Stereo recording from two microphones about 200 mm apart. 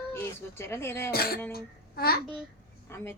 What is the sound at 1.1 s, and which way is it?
A woman's voice, 50° left (ahead or behind).